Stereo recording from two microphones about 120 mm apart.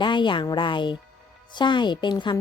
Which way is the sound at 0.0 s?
40° left (ahead or behind).